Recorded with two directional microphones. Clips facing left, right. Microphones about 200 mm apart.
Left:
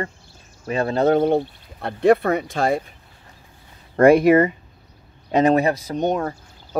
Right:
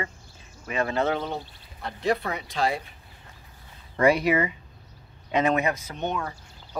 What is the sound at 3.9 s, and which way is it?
Speech, 50° left (ahead or behind).